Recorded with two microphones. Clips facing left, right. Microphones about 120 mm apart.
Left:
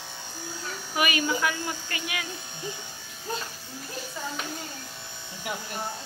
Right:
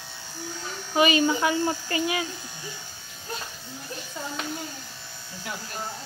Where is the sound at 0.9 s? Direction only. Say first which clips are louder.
Right 5 dB; 25° right (ahead or behind).